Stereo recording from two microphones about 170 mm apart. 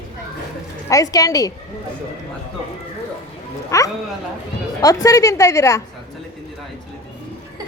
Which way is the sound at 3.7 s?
20° left (ahead or behind).